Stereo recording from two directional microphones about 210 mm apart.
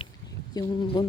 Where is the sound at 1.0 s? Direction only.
20° left (ahead or behind).